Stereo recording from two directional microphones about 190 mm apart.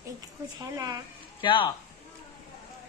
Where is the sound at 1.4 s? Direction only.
25° left (ahead or behind).